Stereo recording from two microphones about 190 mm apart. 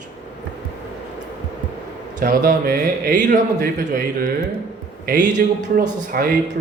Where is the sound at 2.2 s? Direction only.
50° right (ahead or behind).